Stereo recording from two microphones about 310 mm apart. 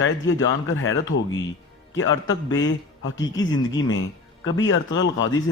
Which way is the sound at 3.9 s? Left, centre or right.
Left.